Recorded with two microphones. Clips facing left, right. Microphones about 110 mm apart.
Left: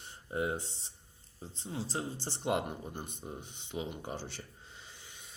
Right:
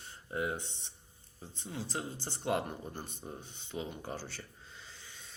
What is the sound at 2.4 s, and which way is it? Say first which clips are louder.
Speech: left 1 dB; 20° left (ahead or behind).